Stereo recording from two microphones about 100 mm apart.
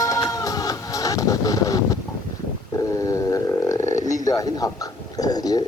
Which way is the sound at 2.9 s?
30° left (ahead or behind).